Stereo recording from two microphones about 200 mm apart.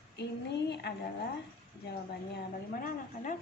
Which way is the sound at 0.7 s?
55° left (ahead or behind).